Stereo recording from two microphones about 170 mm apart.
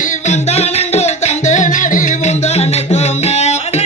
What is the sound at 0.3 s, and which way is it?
Music, 40° left (ahead or behind).